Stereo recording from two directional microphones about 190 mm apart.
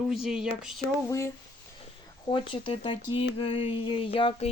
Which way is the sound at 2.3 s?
25° left (ahead or behind).